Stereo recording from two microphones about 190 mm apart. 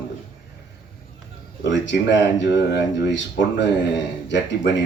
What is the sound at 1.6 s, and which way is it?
Speech, 70° left (ahead or behind).